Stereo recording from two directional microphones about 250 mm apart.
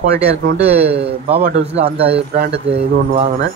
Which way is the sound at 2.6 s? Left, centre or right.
Right.